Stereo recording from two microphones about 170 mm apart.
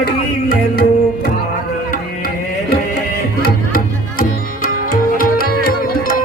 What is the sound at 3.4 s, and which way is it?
Music, 55° left (ahead or behind).